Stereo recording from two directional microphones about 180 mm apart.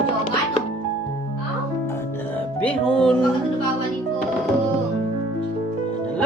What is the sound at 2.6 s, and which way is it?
Music, 5° left (ahead or behind).